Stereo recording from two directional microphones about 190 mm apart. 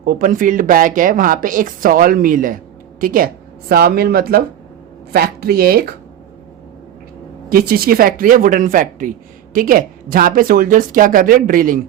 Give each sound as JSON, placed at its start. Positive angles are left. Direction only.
{"t": 0.0, "sound": "speech", "side_deg": -50}
{"t": 7.5, "sound": "speech", "side_deg": -50}